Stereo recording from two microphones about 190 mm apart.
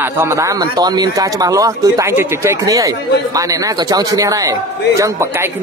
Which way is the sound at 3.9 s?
20° right (ahead or behind).